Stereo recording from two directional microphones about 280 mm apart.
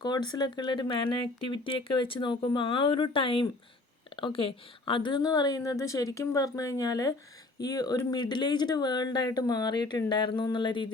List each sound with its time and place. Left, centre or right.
0.0 s speech: centre